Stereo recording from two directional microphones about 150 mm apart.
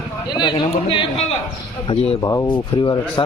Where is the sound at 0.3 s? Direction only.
30° left (ahead or behind).